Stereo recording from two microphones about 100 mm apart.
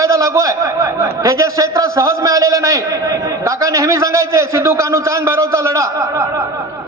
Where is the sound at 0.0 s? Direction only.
35° right (ahead or behind).